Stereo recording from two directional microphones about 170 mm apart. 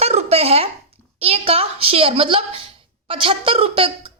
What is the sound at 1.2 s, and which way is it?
A woman's voice, 35° right (ahead or behind).